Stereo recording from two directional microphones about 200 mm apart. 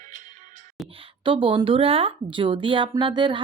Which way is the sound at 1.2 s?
25° right (ahead or behind).